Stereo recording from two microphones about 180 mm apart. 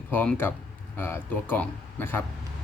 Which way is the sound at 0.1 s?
10° left (ahead or behind).